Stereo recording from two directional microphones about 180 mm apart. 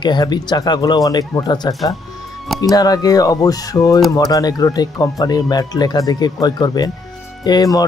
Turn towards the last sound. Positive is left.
turn(degrees=20)  # may be behind; listen again after turning